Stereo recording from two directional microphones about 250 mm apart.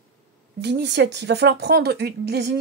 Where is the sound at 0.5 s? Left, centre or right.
Right.